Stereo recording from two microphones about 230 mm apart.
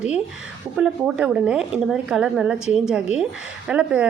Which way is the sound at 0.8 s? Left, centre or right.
Centre.